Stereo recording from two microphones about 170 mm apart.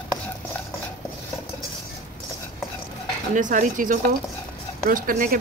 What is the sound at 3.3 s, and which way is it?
A woman's voice, 50° right (ahead or behind).